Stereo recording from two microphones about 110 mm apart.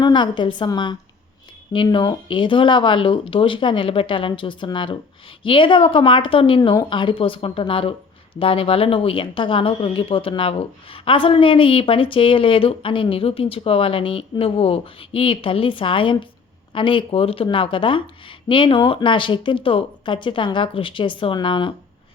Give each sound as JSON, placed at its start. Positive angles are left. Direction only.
{"t": 0.0, "sound": "speech", "side_deg": 45}